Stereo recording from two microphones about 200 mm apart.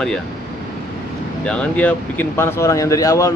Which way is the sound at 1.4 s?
5° left (ahead or behind).